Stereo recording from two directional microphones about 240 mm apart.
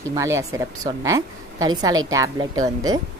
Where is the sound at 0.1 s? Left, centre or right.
Centre.